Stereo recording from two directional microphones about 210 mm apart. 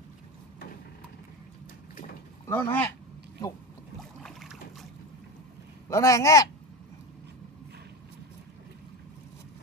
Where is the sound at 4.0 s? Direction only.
Centre (ahead or behind).